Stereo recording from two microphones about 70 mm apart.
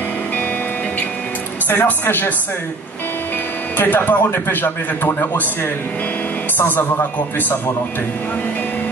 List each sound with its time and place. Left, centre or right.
1.7 s a man's voice: left
3.7 s a man's voice: left